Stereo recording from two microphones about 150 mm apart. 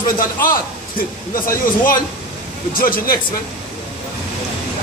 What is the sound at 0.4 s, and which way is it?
Speech, 70° left (ahead or behind).